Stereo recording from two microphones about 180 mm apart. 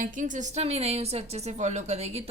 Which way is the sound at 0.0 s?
45° right (ahead or behind).